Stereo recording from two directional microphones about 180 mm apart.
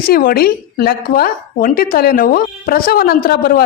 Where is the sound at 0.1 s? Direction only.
55° left (ahead or behind).